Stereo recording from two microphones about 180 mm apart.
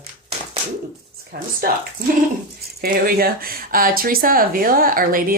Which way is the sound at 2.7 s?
60° right (ahead or behind).